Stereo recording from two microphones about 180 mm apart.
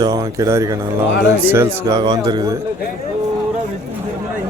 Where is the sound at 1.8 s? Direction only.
25° right (ahead or behind).